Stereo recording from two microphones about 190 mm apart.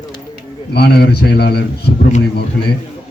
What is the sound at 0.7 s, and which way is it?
Speech, 55° left (ahead or behind).